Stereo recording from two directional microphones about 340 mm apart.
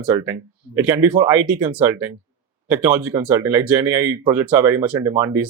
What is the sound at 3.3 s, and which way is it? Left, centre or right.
Speech, centre.